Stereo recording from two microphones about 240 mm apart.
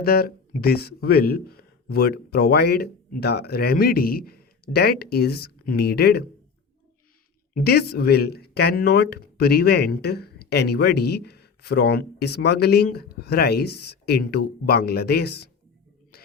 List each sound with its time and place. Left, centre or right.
0.0 s speech: left
7.5 s speech: left